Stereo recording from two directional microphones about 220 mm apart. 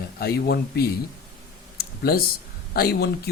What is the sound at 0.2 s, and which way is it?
Speech, 45° left (ahead or behind).